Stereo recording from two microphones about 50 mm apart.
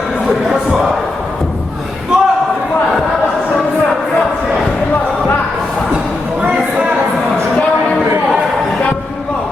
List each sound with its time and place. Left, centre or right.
2.1 s basketball bounce: centre